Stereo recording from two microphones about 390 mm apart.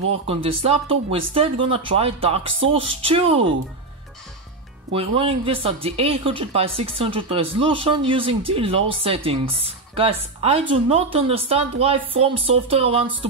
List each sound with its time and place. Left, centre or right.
0.3 s speech: centre
4.9 s speech: centre